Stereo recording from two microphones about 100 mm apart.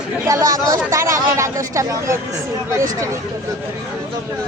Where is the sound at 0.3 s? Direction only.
40° right (ahead or behind).